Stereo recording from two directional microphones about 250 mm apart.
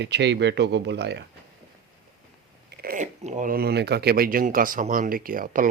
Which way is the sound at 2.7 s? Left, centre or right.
Right.